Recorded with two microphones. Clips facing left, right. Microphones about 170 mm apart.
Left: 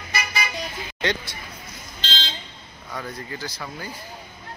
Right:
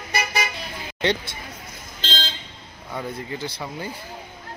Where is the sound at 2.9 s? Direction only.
25° right (ahead or behind).